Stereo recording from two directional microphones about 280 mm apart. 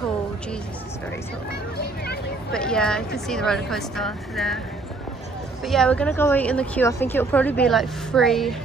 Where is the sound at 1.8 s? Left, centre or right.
Left.